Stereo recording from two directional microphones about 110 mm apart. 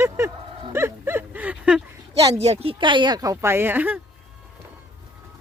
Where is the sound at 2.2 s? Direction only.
70° right (ahead or behind); by 4.0 s 15° right (ahead or behind).